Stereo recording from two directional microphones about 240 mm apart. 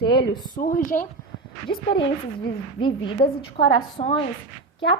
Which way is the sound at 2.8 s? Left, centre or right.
Centre.